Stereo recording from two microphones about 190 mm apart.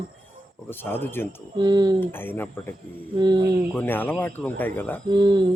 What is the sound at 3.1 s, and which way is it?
Speech, 20° right (ahead or behind).